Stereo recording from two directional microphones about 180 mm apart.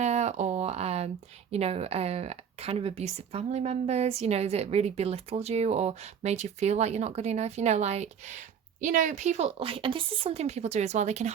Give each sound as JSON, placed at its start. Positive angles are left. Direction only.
{"t": 0.0, "sound": "speech", "side_deg": -40}